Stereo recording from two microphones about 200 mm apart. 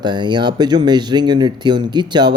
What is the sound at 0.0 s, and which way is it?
Speech, 20° right (ahead or behind).